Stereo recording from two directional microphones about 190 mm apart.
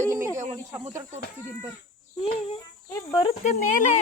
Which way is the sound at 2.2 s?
30° left (ahead or behind).